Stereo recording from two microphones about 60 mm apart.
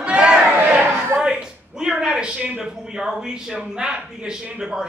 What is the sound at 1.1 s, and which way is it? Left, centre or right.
Speech, centre.